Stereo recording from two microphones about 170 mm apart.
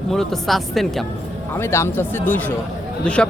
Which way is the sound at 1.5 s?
15° left (ahead or behind).